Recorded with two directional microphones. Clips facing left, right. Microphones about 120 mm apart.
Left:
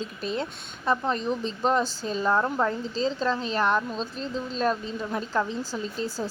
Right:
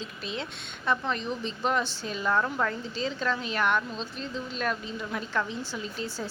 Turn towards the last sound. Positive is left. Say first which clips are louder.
# left 4 dB
turn(degrees=35)  # may be behind; listen again after turning